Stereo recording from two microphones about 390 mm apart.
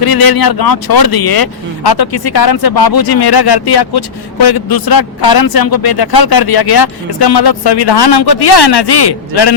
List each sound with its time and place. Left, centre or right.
0.0 s a man's voice: left